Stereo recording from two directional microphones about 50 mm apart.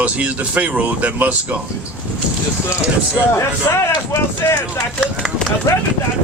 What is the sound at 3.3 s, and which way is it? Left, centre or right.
Speech, left.